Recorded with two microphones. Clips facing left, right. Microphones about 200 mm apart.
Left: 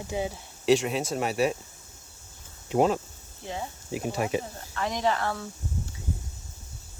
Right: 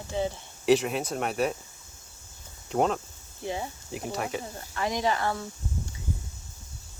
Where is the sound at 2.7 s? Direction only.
5° left (ahead or behind).